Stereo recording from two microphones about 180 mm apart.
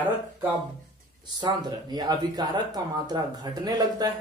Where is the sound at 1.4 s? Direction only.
25° right (ahead or behind).